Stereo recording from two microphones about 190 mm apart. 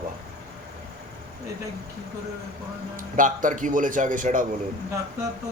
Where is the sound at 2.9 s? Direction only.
45° right (ahead or behind).